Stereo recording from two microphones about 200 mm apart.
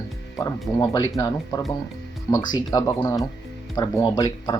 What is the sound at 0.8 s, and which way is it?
Speech, 20° left (ahead or behind).